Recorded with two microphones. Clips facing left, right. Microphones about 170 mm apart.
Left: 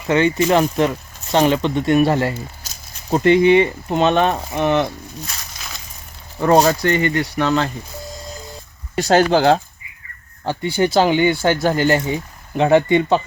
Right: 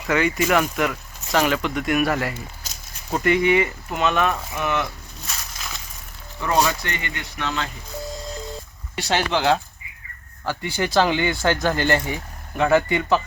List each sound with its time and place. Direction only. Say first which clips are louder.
0.1 s speech: left 5 dB; 30° left (ahead or behind)
6.4 s speech: left 8 dB; 40° left (ahead or behind)
9.0 s speech: left 8 dB; 40° left (ahead or behind)
10.4 s speech: left 6 dB; 20° left (ahead or behind)